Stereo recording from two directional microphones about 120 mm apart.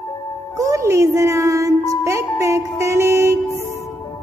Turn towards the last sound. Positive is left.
turn(degrees=-25)  # may be behind; listen again after turning